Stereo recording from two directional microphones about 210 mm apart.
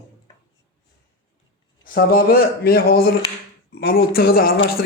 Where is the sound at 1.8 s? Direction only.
45° left (ahead or behind).